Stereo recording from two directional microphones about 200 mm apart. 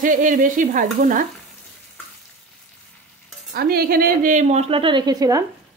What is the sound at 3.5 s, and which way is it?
Speech, 50° right (ahead or behind).